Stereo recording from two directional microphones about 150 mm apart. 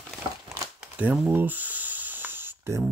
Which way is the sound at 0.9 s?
10° right (ahead or behind).